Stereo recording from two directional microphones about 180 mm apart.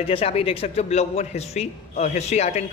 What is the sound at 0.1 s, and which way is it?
A man's voice, 35° left (ahead or behind).